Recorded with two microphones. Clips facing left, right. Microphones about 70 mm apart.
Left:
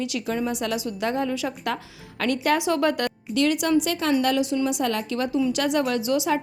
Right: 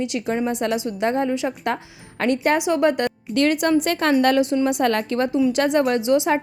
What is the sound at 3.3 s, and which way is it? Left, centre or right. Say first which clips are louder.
A woman's voice: right 3 dB; right.